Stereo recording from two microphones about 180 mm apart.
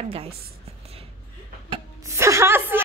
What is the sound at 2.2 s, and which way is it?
Speech, 15° right (ahead or behind).